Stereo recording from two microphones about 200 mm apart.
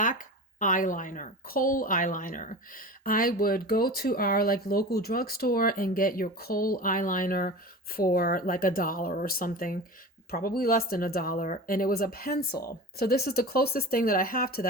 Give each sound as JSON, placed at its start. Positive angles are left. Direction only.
{"t": 0.0, "sound": "speech", "side_deg": 40}